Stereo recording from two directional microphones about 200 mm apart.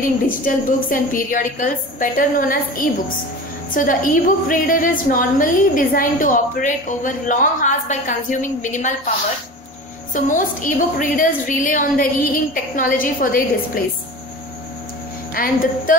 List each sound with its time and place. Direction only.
0.4 s a woman's voice: 45° left (ahead or behind)
10.1 s a woman's voice: 40° left (ahead or behind)
15.3 s a woman's voice: 45° left (ahead or behind)